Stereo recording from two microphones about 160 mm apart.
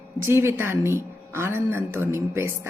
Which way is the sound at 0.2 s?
15° right (ahead or behind).